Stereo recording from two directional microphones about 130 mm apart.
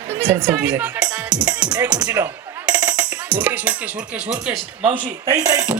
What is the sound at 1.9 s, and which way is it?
Speech, 10° right (ahead or behind).